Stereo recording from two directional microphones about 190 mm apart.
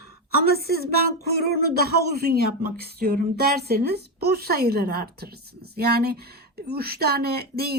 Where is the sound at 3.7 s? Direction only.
55° right (ahead or behind).